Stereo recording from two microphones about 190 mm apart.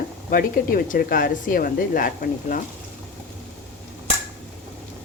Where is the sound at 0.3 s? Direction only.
50° left (ahead or behind).